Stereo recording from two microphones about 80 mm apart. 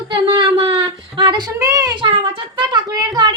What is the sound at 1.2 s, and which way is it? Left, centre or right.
Speech, right.